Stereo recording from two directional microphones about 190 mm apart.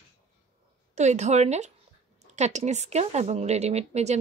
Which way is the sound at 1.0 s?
35° right (ahead or behind).